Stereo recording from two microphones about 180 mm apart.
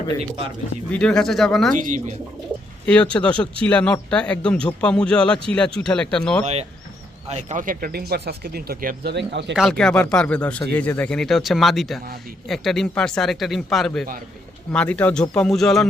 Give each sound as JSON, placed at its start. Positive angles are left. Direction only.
{"t": 0.2, "sound": "speech", "side_deg": -30}
{"t": 0.9, "sound": "speech", "side_deg": 5}
{"t": 1.7, "sound": "speech", "side_deg": -45}
{"t": 2.8, "sound": "speech", "side_deg": 5}
{"t": 6.4, "sound": "speech", "side_deg": -35}
{"t": 9.1, "sound": "speech", "side_deg": -75}
{"t": 9.6, "sound": "speech", "side_deg": 0}